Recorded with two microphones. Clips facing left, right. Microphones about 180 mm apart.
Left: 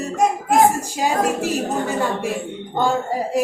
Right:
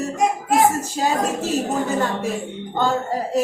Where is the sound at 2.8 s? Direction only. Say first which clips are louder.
Left 1 dB; 10° left (ahead or behind).